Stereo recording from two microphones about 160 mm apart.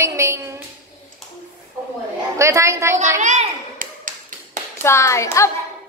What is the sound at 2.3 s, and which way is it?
Speech, 20° right (ahead or behind).